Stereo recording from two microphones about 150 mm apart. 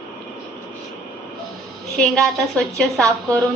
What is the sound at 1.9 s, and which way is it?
A woman's voice, 5° left (ahead or behind).